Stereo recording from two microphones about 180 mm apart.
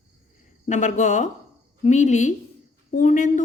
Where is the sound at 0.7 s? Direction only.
40° left (ahead or behind).